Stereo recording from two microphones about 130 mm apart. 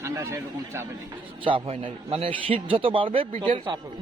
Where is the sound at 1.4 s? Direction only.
40° right (ahead or behind).